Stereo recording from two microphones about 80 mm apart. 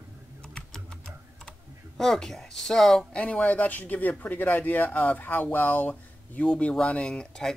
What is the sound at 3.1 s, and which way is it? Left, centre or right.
Speech, centre.